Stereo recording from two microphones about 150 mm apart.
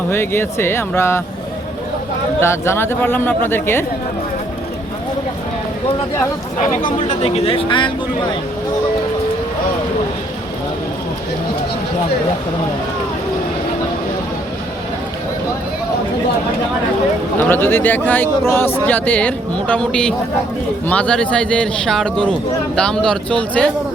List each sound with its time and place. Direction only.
0.1 s speech: 15° left (ahead or behind)
2.4 s speech: 15° left (ahead or behind)
7.1 s speech: 45° left (ahead or behind)
17.5 s speech: 15° left (ahead or behind)